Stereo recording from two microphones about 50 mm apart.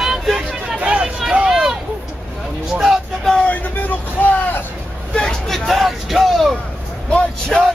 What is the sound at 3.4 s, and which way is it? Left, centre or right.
Vehicle, left.